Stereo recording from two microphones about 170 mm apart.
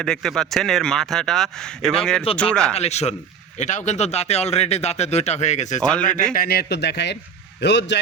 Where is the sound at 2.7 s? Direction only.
40° left (ahead or behind).